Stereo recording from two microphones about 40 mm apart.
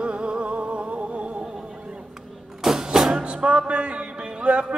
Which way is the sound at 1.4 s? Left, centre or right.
Right.